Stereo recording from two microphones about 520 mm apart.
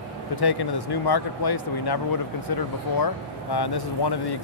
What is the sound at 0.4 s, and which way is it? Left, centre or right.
Speech, left.